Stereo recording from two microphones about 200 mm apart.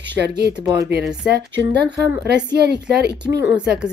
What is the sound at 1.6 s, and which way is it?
A woman's voice, 55° right (ahead or behind).